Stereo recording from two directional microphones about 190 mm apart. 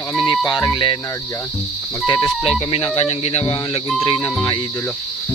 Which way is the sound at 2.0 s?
20° left (ahead or behind).